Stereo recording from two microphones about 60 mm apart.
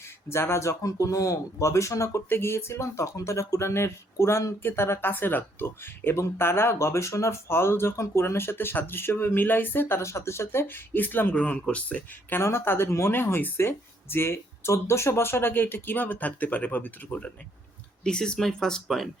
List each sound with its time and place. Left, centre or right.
0.3 s speech: left
2.3 s speech: left
10.0 s speech: left
11.3 s speech: centre
12.4 s speech: left; by 19.0 s centre